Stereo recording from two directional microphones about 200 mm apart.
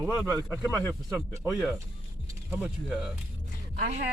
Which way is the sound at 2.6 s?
5° right (ahead or behind).